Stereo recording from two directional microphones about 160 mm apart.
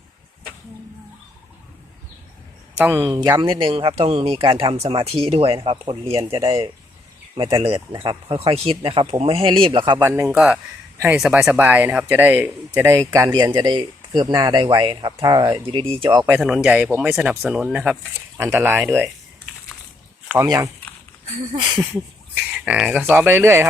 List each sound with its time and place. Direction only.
2.7 s speech: 10° right (ahead or behind)
3.0 s speech: 25° right (ahead or behind)
10.0 s speech: 15° right (ahead or behind)
16.3 s speech: 5° right (ahead or behind)
20.4 s speech: 20° right (ahead or behind)
22.4 s speech: 10° right (ahead or behind)